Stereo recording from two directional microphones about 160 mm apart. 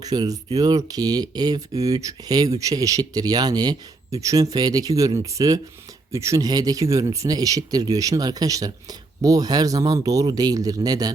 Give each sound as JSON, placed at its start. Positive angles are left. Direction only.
{"t": 0.0, "sound": "speech", "side_deg": -25}